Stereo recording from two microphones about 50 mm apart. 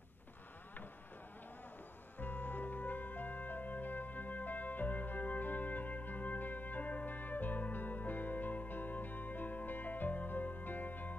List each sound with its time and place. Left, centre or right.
2.1 s music: left